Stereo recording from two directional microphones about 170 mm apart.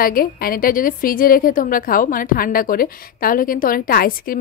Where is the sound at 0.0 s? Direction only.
60° left (ahead or behind).